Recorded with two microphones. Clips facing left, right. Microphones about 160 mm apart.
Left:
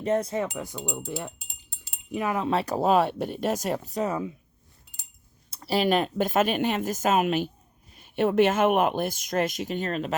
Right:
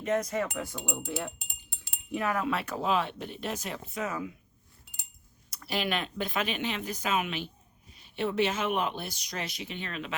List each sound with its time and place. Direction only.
0.0 s wind chime: 30° left (ahead or behind)
0.5 s speech: 15° left (ahead or behind)
1.4 s a sound: 55° right (ahead or behind)
2.1 s speech: 15° left (ahead or behind)
2.4 s speech: 30° left (ahead or behind)
5.5 s speech: 35° left (ahead or behind)